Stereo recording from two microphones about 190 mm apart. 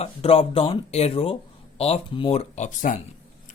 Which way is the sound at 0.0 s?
30° left (ahead or behind).